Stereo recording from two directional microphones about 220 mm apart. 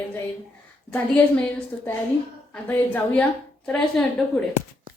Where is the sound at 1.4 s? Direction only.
10° left (ahead or behind).